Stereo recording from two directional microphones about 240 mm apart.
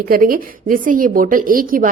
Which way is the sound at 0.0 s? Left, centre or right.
Right.